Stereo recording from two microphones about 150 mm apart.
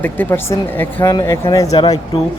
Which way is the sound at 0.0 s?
15° left (ahead or behind).